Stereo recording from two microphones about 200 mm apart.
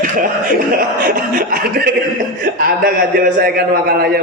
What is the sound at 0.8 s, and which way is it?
A man's voice, 45° right (ahead or behind).